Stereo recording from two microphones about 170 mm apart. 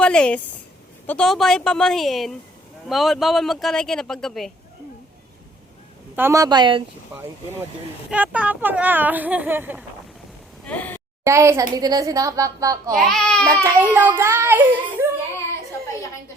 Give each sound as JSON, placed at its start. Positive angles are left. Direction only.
{"t": 0.0, "sound": "a man's voice", "side_deg": 5}
{"t": 6.1, "sound": "speech", "side_deg": -15}
{"t": 8.1, "sound": "speech", "side_deg": -10}
{"t": 10.7, "sound": "speech", "side_deg": 10}
{"t": 11.2, "sound": "speech", "side_deg": -15}
{"t": 12.9, "sound": "a man's voice", "side_deg": 5}
{"t": 13.9, "sound": "speech", "side_deg": -10}